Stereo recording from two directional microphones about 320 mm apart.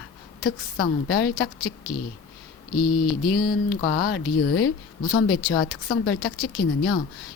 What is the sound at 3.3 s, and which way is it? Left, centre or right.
Speech, left.